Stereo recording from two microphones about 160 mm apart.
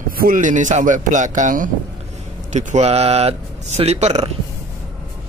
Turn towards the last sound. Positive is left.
turn(degrees=-40)  # may be behind; listen again after turning